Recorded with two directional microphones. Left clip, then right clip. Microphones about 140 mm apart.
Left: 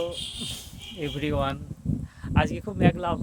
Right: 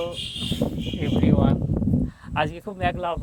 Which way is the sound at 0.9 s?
30° left (ahead or behind).